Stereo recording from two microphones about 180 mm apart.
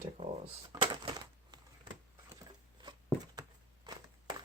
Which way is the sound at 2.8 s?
25° right (ahead or behind).